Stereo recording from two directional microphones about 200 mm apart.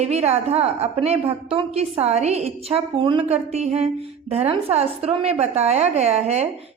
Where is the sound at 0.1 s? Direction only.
30° right (ahead or behind).